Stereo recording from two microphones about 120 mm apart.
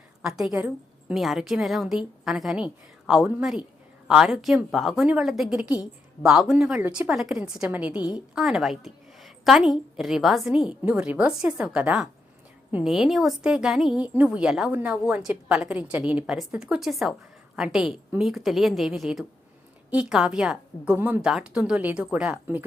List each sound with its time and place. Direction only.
0.2 s a woman's voice: 5° right (ahead or behind)
1.1 s a woman's voice: centre (ahead or behind)
6.8 s a woman's voice: 15° right (ahead or behind)
7.1 s a woman's voice: 5° right (ahead or behind)